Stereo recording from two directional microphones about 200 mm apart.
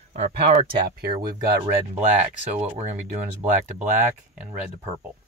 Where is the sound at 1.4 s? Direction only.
15° right (ahead or behind).